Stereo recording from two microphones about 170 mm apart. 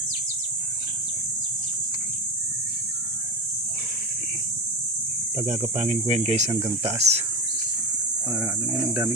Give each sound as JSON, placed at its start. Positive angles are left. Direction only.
{"t": 5.4, "sound": "speech", "side_deg": -40}
{"t": 6.5, "sound": "speech", "side_deg": -20}
{"t": 6.8, "sound": "speech", "side_deg": -40}